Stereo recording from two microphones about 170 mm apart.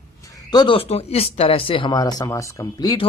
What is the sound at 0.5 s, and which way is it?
Speech, 30° left (ahead or behind).